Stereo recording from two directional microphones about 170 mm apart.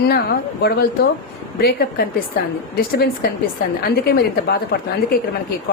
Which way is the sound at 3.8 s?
70° left (ahead or behind).